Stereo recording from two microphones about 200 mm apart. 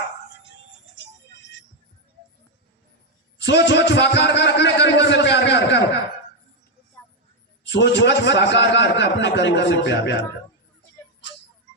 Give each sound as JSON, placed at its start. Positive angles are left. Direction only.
{"t": 0.4, "sound": "music", "side_deg": 65}
{"t": 3.3, "sound": "a sound", "side_deg": 60}
{"t": 7.6, "sound": "a man's voice", "side_deg": 60}